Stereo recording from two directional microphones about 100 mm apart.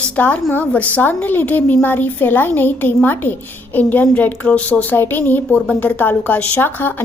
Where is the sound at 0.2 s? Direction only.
15° left (ahead or behind).